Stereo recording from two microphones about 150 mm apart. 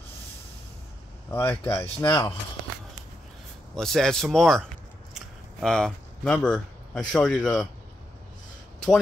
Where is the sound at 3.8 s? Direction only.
5° left (ahead or behind).